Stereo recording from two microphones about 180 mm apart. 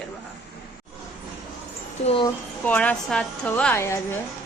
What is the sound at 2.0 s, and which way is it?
Speech, 30° left (ahead or behind).